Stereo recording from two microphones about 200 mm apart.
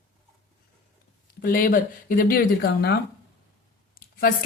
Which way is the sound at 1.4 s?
45° left (ahead or behind).